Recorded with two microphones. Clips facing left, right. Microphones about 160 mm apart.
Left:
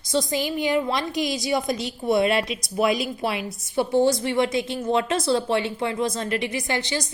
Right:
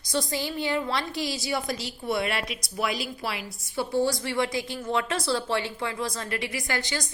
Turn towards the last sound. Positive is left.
turn(degrees=20)  # may be behind; listen again after turning